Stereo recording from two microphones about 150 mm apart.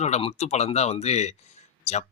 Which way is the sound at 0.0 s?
45° left (ahead or behind).